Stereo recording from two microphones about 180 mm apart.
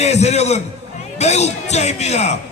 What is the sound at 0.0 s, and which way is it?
Speech, 40° left (ahead or behind).